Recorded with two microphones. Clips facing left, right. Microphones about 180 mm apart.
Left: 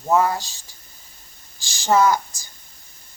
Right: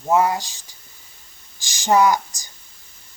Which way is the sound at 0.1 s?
15° right (ahead or behind).